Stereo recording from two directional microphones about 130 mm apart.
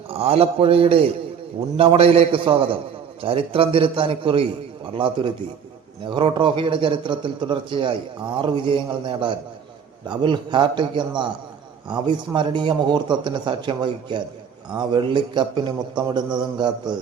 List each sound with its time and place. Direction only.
0.1 s a man's voice: 50° right (ahead or behind)